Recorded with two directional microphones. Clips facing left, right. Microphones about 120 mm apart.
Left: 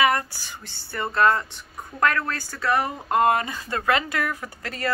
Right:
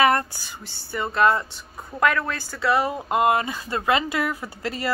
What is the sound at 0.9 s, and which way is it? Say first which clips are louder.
Speech: right 1 dB; 10° right (ahead or behind).